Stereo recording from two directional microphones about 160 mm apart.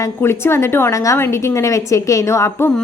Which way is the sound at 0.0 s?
15° left (ahead or behind).